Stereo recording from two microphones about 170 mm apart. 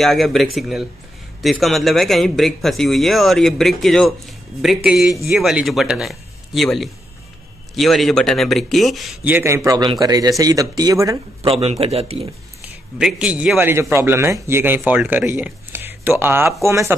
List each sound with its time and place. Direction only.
0.0 s speech: centre (ahead or behind)
9.7 s speech: 20° right (ahead or behind)
11.4 s a man's voice: 35° right (ahead or behind)
12.6 s a man's voice: 5° right (ahead or behind)